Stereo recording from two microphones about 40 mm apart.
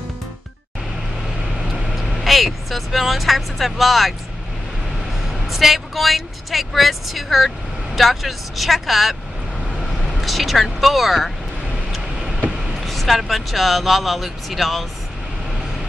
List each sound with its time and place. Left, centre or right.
1.6 s vehicle: centre
2.1 s speech: centre
5.5 s speech: centre
10.1 s speech: centre
12.8 s speech: centre